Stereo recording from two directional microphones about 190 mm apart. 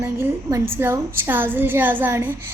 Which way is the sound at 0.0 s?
10° right (ahead or behind).